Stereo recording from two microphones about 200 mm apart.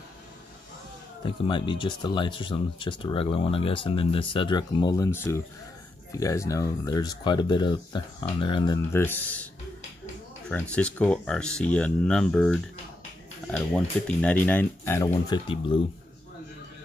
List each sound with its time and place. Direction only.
1.2 s speech: 25° left (ahead or behind); by 9.5 s 10° left (ahead or behind)
10.5 s speech: 5° left (ahead or behind); by 15.8 s 25° left (ahead or behind)